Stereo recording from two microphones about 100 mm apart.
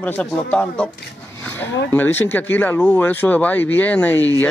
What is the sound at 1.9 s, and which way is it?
Speech, 20° left (ahead or behind).